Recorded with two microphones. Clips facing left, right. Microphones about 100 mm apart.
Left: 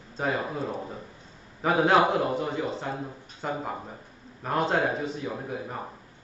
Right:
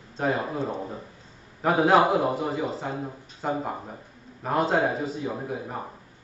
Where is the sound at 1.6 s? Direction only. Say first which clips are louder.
Right 2 dB; 5° right (ahead or behind).